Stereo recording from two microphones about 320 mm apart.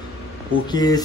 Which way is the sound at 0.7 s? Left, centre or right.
Centre.